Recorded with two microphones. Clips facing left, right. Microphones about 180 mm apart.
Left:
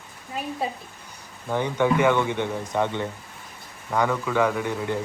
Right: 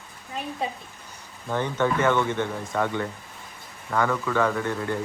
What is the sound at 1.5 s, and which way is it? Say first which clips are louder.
Speech: left 2 dB; 15° left (ahead or behind).